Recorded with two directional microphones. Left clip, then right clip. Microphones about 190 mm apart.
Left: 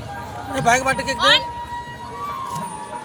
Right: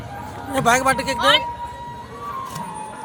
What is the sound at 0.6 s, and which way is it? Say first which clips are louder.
Speech: right 1 dB; 20° right (ahead or behind).